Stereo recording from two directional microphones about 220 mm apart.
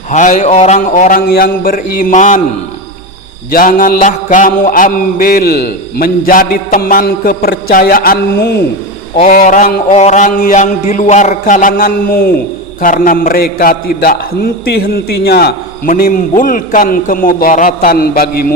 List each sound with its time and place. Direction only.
0.1 s a man's voice: 35° left (ahead or behind)
3.5 s a man's voice: 40° left (ahead or behind)